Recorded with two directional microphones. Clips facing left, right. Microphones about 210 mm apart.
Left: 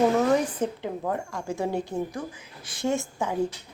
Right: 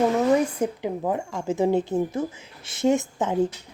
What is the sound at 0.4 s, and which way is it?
A woman's voice, 15° right (ahead or behind).